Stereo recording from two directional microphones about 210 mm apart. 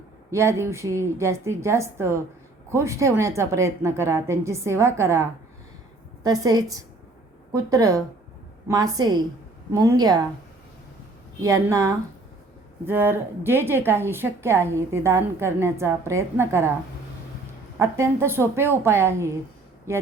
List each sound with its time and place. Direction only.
0.3 s a woman's voice: 15° right (ahead or behind)
6.2 s a woman's voice: 15° right (ahead or behind)
11.4 s a woman's voice: 15° right (ahead or behind)
17.7 s a woman's voice: 15° right (ahead or behind)